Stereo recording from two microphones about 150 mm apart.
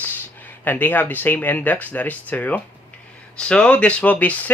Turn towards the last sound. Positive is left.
turn(degrees=10)  # may be behind; listen again after turning